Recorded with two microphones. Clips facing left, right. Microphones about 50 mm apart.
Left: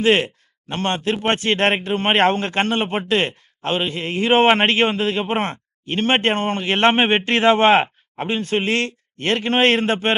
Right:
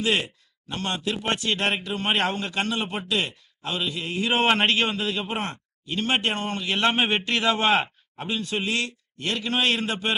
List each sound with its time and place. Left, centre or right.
0.0 s a man's voice: left